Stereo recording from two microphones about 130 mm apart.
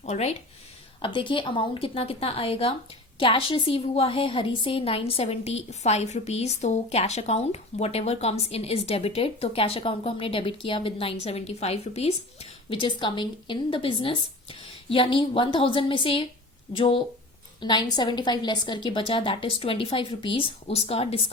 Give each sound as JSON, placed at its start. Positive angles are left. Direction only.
{"t": 0.0, "sound": "speech", "side_deg": 60}
{"t": 1.0, "sound": "a woman's voice", "side_deg": 40}
{"t": 12.8, "sound": "a woman's voice", "side_deg": 40}